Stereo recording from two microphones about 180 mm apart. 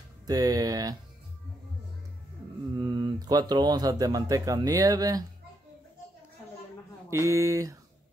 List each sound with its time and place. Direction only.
0.3 s speech: 20° right (ahead or behind)
2.8 s speech: 25° right (ahead or behind)
7.1 s speech: 15° right (ahead or behind)